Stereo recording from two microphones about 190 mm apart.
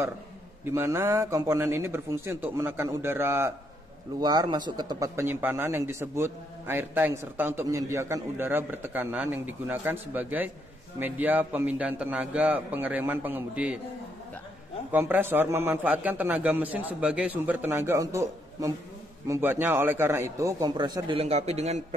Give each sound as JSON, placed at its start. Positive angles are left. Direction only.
{"t": 0.7, "sound": "speech", "side_deg": -15}
{"t": 14.9, "sound": "speech", "side_deg": -10}